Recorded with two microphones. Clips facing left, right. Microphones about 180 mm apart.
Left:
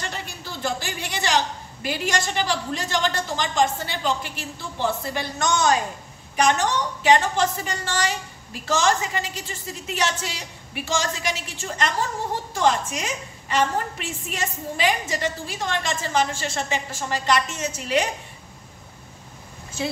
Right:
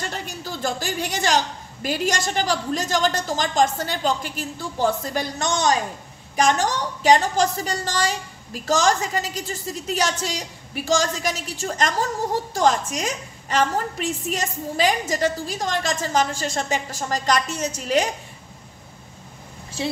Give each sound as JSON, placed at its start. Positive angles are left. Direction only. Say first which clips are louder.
{"t": 0.1, "sound": "a woman's voice", "louder": "right 3 dB", "side_deg": -45}